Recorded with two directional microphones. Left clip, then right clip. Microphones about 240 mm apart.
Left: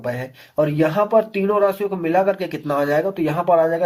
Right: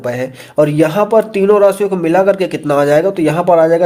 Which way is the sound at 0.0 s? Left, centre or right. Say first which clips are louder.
Right 8 dB; right.